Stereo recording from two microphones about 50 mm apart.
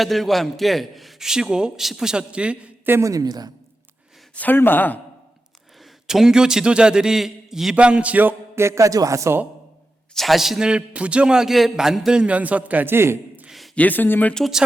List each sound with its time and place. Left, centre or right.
0.0 s a man's voice: centre
1.3 s a man's voice: centre
4.4 s speech: left
5.8 s a man's voice: centre
7.8 s a man's voice: right
8.5 s speech: right
10.2 s a man's voice: centre
10.6 s a man's voice: right
12.8 s a man's voice: right
13.7 s speech: left